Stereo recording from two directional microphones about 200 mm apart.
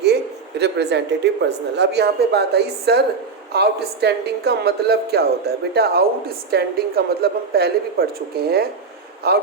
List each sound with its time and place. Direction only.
0.6 s a woman's voice: 55° right (ahead or behind)